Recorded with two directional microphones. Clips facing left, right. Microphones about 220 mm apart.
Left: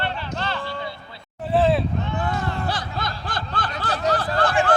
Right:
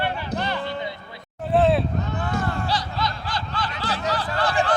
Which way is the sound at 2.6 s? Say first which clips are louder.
Right 1 dB; 55° left (ahead or behind).